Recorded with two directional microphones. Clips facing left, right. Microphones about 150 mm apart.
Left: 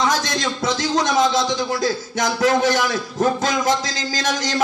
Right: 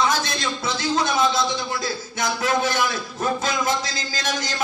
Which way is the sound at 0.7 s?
40° left (ahead or behind).